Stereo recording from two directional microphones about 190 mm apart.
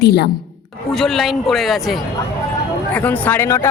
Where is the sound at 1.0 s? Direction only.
Centre (ahead or behind).